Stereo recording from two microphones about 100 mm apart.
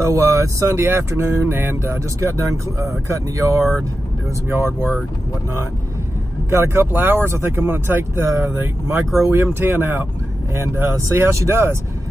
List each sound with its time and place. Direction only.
0.1 s speech: 30° right (ahead or behind)
6.5 s speech: 25° right (ahead or behind)
11.1 s speech: 30° right (ahead or behind)